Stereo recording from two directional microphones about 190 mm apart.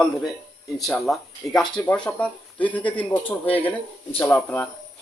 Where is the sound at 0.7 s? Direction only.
Centre (ahead or behind).